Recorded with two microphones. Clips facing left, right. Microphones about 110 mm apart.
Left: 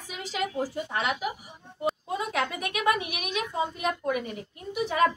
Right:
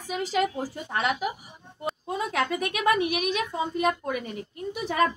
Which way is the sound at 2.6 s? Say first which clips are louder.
Right 3 dB; 40° right (ahead or behind).